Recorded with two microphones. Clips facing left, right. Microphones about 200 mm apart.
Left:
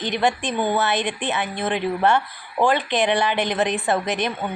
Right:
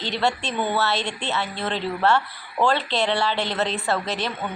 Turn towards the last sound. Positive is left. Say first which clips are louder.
# left 3 dB
turn(degrees=15)  # may be behind; listen again after turning